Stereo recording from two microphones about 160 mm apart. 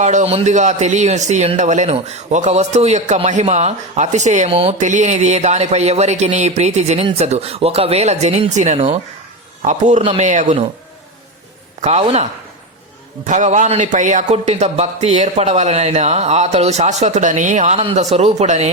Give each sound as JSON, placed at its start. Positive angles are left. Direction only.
{"t": 0.0, "sound": "a man's voice", "side_deg": -45}
{"t": 11.8, "sound": "a man's voice", "side_deg": -40}